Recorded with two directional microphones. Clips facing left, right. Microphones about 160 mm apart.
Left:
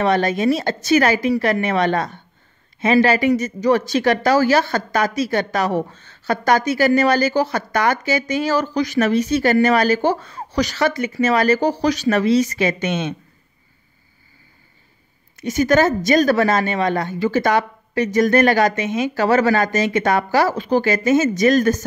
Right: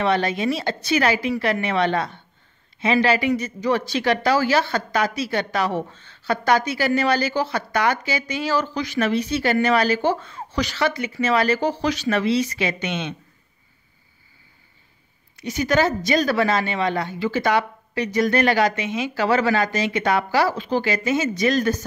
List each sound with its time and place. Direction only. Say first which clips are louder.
0.0 s speech: left 4 dB; 45° left (ahead or behind)
15.3 s speech: left 5 dB; 50° left (ahead or behind)